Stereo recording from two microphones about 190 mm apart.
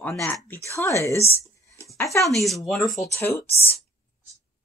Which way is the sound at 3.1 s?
10° left (ahead or behind).